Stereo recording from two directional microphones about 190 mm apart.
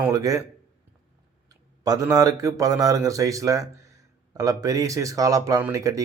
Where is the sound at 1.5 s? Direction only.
20° right (ahead or behind).